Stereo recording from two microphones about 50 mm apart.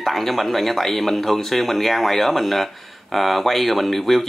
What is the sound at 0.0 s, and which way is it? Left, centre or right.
Speech, centre.